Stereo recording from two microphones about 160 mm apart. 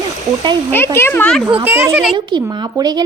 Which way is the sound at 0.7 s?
15° left (ahead or behind).